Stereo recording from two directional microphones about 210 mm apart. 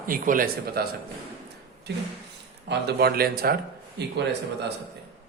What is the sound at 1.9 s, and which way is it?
Speech, 55° right (ahead or behind).